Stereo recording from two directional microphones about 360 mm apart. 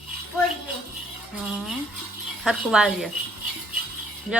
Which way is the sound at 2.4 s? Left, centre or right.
Centre.